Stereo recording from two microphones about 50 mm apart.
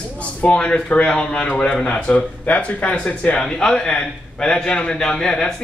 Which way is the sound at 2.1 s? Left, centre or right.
Left.